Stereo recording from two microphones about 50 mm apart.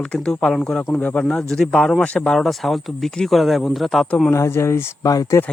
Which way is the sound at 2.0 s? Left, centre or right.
Left.